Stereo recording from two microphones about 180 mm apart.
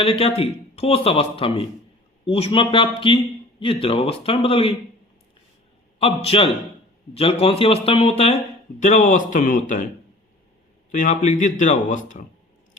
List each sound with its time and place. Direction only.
0.0 s speech: 30° left (ahead or behind)
6.0 s speech: 30° left (ahead or behind)
10.9 s speech: 45° left (ahead or behind)